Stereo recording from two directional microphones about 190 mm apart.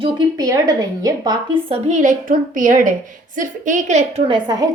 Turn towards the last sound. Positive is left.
turn(degrees=-20)  # may be behind; listen again after turning